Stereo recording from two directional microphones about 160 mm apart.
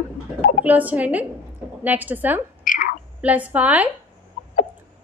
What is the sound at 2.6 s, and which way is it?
Whispering, 55° left (ahead or behind).